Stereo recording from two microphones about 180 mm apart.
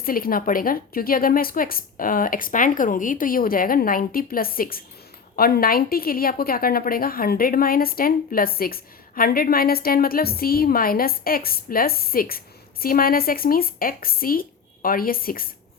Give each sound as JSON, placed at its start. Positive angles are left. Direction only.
{"t": 0.0, "sound": "a woman's voice", "side_deg": 55}